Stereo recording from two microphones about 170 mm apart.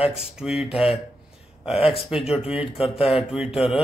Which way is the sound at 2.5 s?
35° left (ahead or behind).